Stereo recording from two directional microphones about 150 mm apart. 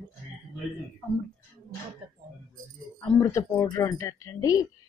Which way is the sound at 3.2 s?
20° left (ahead or behind).